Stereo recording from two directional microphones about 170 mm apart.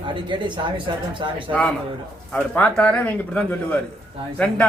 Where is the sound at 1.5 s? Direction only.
5° left (ahead or behind).